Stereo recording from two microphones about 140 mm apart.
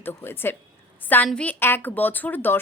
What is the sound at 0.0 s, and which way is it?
Speech, 15° left (ahead or behind).